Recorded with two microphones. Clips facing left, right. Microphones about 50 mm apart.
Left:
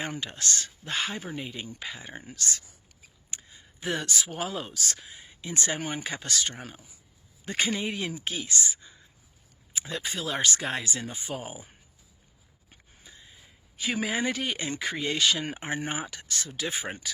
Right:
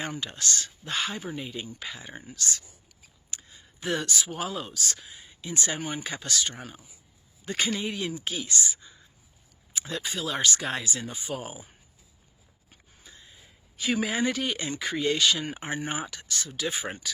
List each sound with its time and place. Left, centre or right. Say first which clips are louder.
0.1 s speech: even; left
2.2 s speech: right 1 dB; left
3.2 s speech: even; left
9.7 s speech: right 1 dB; left
13.1 s a sound: even; centre
13.7 s speech: right 2 dB; centre
14.7 s speech: right 3 dB; left
16.1 s speech: right 1 dB; left